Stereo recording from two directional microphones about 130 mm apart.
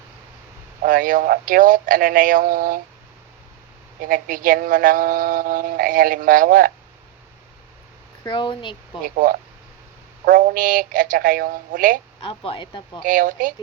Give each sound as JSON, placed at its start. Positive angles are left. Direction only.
{"t": 0.9, "sound": "speech", "side_deg": -90}
{"t": 4.1, "sound": "speech", "side_deg": -90}
{"t": 8.3, "sound": "speech", "side_deg": 40}
{"t": 9.0, "sound": "speech", "side_deg": -90}
{"t": 12.2, "sound": "speech", "side_deg": 45}
{"t": 13.0, "sound": "speech", "side_deg": -90}